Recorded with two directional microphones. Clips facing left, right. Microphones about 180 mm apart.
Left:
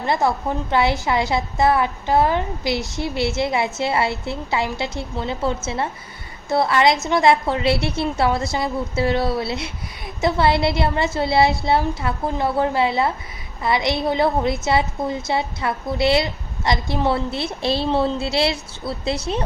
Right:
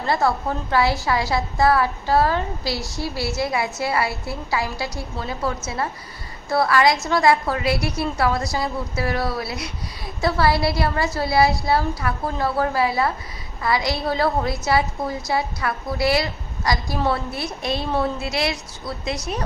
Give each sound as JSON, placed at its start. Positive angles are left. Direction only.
{"t": 0.0, "sound": "a woman's voice", "side_deg": 20}